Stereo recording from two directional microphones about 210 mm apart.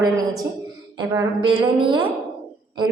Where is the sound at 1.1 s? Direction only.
25° right (ahead or behind).